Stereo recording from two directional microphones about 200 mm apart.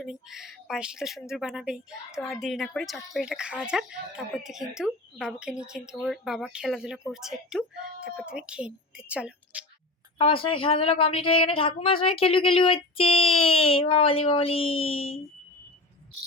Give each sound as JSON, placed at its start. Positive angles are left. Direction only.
{"t": 0.0, "sound": "speech", "side_deg": 0}
{"t": 10.2, "sound": "a woman's voice", "side_deg": 25}